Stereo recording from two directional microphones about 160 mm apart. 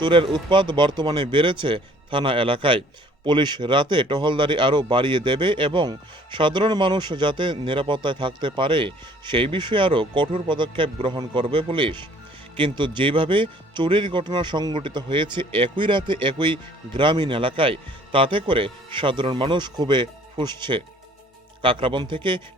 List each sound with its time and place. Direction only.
0.0 s speech: 30° right (ahead or behind)